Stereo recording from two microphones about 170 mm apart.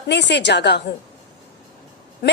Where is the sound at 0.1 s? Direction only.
90° left.